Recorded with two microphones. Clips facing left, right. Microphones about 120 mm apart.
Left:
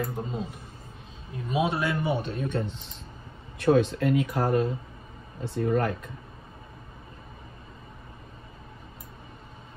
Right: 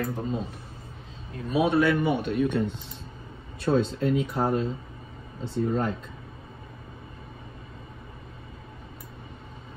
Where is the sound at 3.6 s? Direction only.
65° left (ahead or behind).